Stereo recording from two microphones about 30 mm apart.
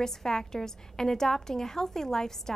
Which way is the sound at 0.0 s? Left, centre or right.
Centre.